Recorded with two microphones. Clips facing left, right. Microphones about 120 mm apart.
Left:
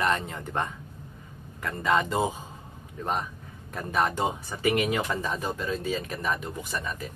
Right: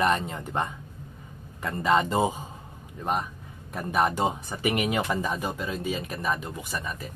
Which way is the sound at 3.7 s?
10° right (ahead or behind).